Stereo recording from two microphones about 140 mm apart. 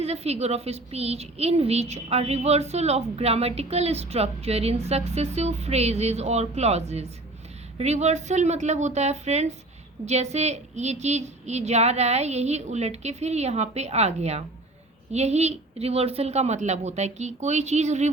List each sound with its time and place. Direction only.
0.0 s a woman's voice: 50° right (ahead or behind)